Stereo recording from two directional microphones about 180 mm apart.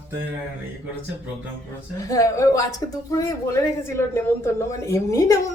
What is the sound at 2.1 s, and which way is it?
A woman's voice, 20° left (ahead or behind).